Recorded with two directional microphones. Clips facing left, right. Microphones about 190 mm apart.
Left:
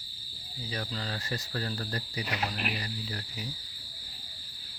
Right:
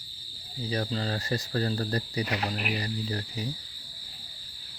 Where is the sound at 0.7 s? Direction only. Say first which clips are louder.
Right 6 dB; 35° right (ahead or behind).